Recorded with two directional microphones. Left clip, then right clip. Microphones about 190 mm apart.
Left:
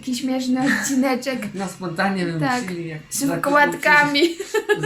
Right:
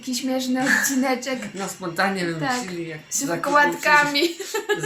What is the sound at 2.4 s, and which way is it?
A woman's voice, 20° left (ahead or behind).